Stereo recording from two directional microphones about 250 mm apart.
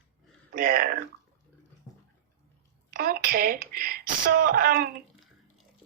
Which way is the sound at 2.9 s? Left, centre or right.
Right.